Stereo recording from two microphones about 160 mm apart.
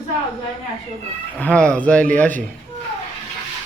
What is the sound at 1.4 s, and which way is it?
Speech, 10° left (ahead or behind).